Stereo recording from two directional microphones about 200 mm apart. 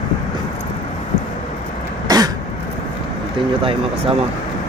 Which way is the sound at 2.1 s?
20° right (ahead or behind).